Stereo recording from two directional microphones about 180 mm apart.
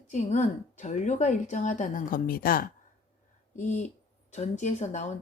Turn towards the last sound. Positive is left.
turn(degrees=40)  # may be behind; listen again after turning